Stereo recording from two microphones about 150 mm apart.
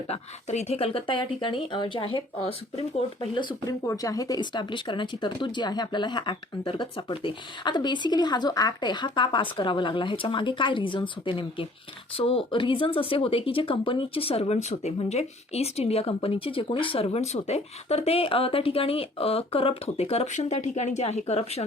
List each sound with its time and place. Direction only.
0.1 s speech: 45° left (ahead or behind)
3.8 s speech: 20° left (ahead or behind); by 21.6 s 45° left (ahead or behind)